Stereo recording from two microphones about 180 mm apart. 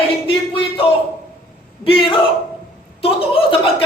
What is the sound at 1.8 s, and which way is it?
A woman's voice, 30° left (ahead or behind).